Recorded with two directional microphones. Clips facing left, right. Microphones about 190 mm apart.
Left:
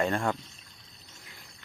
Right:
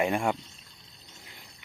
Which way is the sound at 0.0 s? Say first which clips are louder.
Right 1 dB; 15° right (ahead or behind).